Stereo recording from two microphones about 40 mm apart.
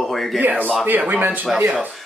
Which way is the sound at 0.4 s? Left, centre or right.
Right.